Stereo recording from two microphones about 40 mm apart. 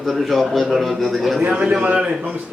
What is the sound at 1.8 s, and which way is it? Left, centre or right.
Speech, right.